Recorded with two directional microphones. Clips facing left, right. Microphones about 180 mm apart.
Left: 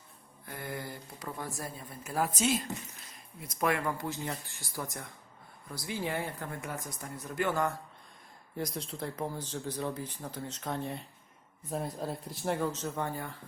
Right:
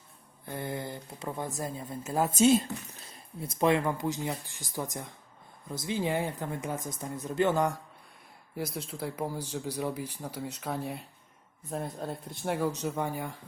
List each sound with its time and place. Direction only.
0.4 s speech: 25° right (ahead or behind)
8.5 s speech: 5° right (ahead or behind)